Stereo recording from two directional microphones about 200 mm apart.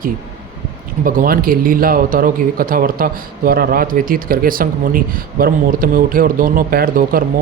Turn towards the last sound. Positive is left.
turn(degrees=-45)  # may be behind; listen again after turning